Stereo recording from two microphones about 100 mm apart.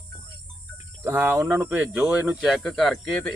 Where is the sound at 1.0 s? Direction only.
20° right (ahead or behind).